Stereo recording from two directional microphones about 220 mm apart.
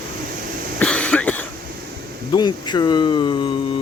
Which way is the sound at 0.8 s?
5° left (ahead or behind).